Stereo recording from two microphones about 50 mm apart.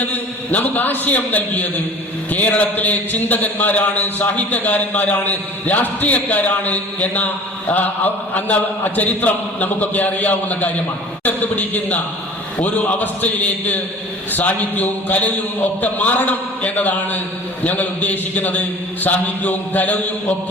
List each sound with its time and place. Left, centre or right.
0.1 s a man's voice: left